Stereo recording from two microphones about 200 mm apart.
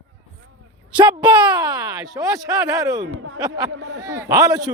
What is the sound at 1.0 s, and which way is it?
A man's voice, 20° right (ahead or behind).